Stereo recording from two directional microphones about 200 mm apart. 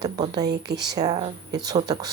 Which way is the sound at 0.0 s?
20° right (ahead or behind).